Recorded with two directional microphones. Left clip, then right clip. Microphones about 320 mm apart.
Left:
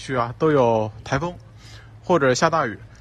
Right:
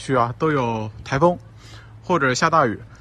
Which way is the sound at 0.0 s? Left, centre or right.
Centre.